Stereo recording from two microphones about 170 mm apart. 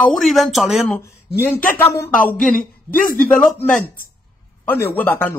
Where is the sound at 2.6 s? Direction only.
55° left (ahead or behind).